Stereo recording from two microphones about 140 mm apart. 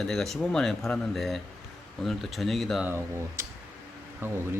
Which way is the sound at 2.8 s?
20° right (ahead or behind).